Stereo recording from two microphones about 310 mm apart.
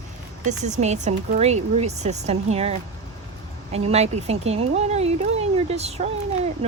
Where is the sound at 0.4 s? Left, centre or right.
Right.